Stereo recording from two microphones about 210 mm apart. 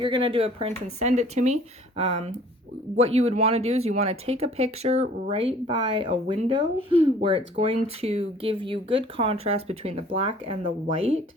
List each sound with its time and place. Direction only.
0.0 s speech: 25° right (ahead or behind)